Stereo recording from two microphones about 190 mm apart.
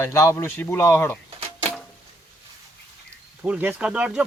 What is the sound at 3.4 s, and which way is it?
Speech, 10° right (ahead or behind).